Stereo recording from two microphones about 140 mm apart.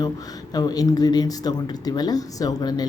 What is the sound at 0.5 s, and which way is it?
Speech, 25° left (ahead or behind).